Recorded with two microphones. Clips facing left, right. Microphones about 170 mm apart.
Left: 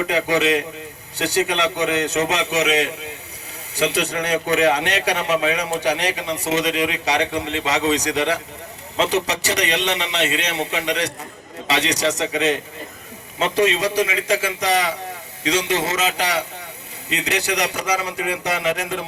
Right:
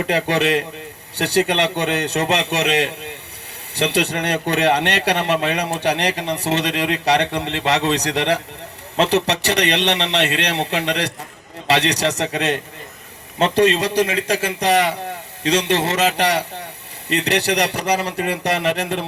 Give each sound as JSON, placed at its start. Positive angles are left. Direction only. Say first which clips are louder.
{"t": 0.1, "sound": "a man's voice", "louder": "right 2 dB", "side_deg": -65}